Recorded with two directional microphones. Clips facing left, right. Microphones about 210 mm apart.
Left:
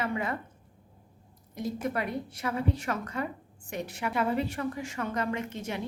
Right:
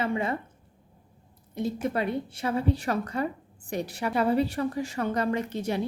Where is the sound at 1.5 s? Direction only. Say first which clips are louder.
Right 3 dB; 25° right (ahead or behind).